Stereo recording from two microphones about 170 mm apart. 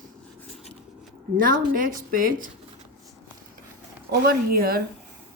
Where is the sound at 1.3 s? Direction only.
55° right (ahead or behind).